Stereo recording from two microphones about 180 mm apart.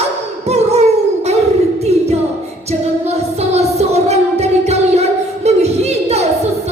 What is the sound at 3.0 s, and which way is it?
Music, 35° right (ahead or behind).